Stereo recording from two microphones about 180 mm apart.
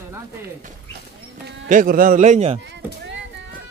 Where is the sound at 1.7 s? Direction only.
50° right (ahead or behind).